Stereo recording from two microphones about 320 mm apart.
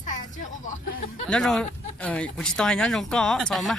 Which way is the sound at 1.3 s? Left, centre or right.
Centre.